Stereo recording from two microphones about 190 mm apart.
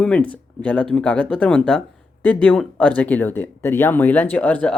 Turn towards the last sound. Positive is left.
turn(degrees=5)  # may be behind; listen again after turning